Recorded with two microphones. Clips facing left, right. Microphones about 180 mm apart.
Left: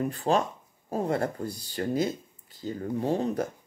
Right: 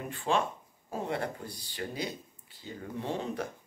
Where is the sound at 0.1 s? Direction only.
40° left (ahead or behind).